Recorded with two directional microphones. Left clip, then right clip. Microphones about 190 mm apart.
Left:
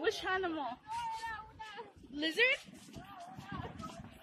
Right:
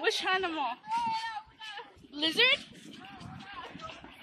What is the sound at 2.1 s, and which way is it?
Speech, 5° left (ahead or behind).